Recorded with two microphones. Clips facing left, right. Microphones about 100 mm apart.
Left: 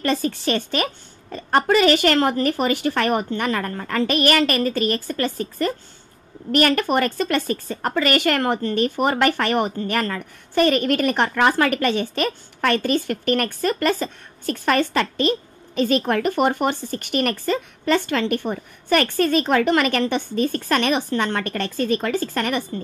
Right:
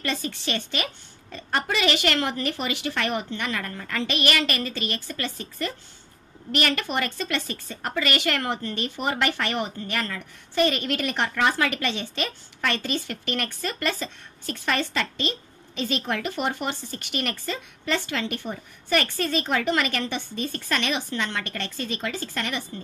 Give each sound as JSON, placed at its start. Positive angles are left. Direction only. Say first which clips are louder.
{"t": 0.0, "sound": "a woman's voice", "louder": "left 8 dB", "side_deg": 45}